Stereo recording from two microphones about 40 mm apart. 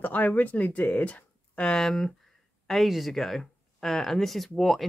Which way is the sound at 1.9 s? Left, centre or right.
Centre.